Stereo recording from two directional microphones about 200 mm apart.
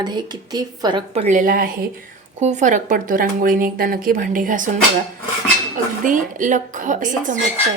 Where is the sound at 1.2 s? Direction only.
40° right (ahead or behind).